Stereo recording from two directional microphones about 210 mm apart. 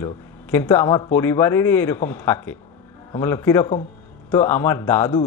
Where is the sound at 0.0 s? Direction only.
10° left (ahead or behind).